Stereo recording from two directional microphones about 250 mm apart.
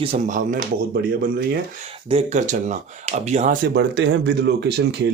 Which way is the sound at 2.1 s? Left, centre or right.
Right.